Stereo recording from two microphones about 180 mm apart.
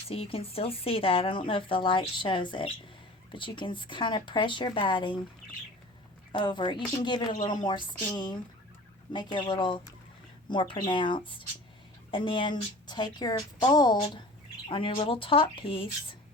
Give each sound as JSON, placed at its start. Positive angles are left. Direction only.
{"t": 0.1, "sound": "a woman's voice", "side_deg": 35}
{"t": 6.3, "sound": "a woman's voice", "side_deg": 25}